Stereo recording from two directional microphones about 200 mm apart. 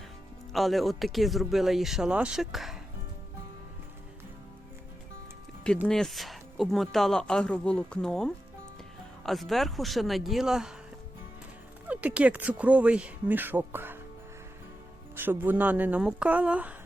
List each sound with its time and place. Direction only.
0.5 s speech: centre (ahead or behind)
5.9 s speech: centre (ahead or behind)
11.9 s speech: 5° right (ahead or behind)
15.1 s speech: 10° right (ahead or behind)